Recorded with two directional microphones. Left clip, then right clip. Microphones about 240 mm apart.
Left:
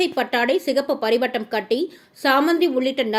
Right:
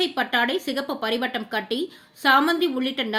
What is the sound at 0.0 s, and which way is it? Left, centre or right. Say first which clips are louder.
Speech: left 2 dB; centre.